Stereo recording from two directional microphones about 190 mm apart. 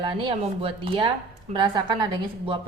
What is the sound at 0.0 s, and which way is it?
A woman's voice, 25° right (ahead or behind).